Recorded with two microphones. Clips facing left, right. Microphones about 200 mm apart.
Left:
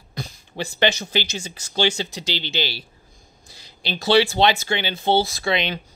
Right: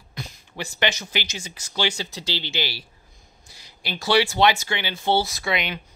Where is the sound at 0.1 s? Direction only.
35° left (ahead or behind).